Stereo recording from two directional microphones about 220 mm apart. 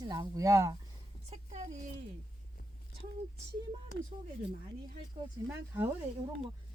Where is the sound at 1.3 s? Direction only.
30° right (ahead or behind).